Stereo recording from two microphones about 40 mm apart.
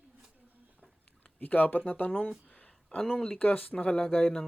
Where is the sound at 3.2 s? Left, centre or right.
Left.